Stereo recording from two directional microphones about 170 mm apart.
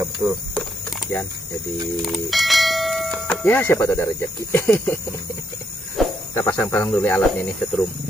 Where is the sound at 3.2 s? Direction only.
10° left (ahead or behind).